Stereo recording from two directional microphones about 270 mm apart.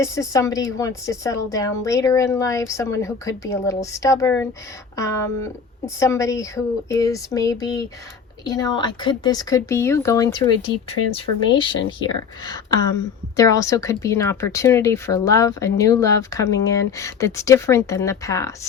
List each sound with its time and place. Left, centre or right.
0.0 s speech: centre
13.3 s speech: centre